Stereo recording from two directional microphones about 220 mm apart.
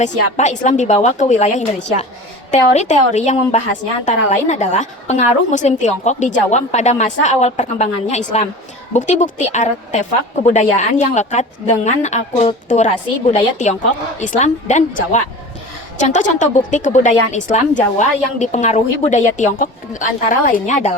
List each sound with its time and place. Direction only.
0.0 s a woman's voice: 35° left (ahead or behind)